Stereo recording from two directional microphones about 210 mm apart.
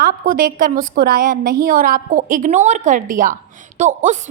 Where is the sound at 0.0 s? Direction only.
40° right (ahead or behind).